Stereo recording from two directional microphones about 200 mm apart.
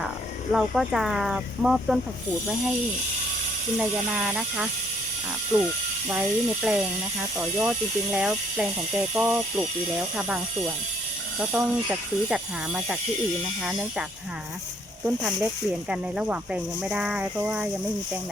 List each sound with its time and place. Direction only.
0.5 s speech: centre (ahead or behind)
3.8 s speech: 5° right (ahead or behind)
5.5 s speech: 15° right (ahead or behind)
6.1 s speech: 5° right (ahead or behind)
15.0 s speech: 5° right (ahead or behind)